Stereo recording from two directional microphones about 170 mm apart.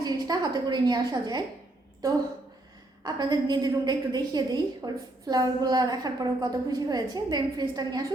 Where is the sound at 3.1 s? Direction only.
25° right (ahead or behind).